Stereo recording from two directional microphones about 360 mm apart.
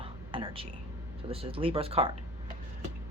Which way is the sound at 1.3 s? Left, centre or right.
Centre.